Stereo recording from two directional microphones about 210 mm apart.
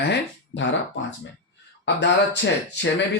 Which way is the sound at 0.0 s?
55° left (ahead or behind).